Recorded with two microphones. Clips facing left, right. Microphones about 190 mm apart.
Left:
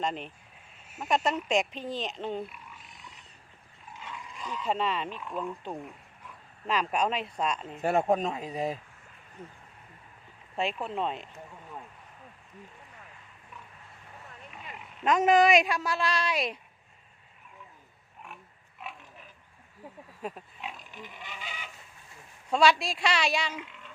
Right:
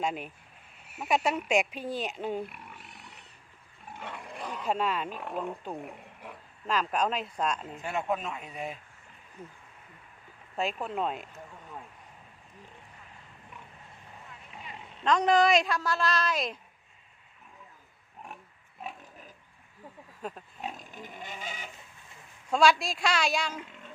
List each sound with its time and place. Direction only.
0.0 s speech: 5° right (ahead or behind)
2.5 s pig: 60° right (ahead or behind)
3.9 s dog: 60° right (ahead or behind)
4.7 s speech: 5° right (ahead or behind)
5.0 s speech: 55° right (ahead or behind)
5.8 s a sound: 65° right (ahead or behind)
6.7 s speech: 5° left (ahead or behind)
7.9 s speech: 45° left (ahead or behind)
10.8 s speech: 5° right (ahead or behind)
15.4 s a woman's voice: 15° left (ahead or behind)
20.2 s speech: 5° left (ahead or behind)
20.6 s pig: 45° right (ahead or behind)
22.5 s speech: centre (ahead or behind)